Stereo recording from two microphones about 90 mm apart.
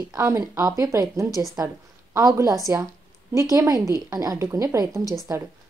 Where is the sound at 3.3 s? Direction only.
40° right (ahead or behind).